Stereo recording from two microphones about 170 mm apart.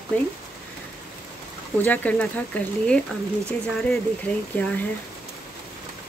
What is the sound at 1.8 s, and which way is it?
Speech, 10° left (ahead or behind).